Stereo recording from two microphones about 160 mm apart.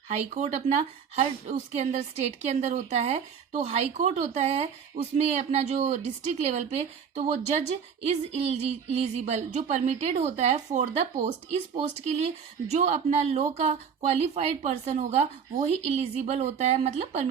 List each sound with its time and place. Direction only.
0.3 s a woman's voice: 45° right (ahead or behind)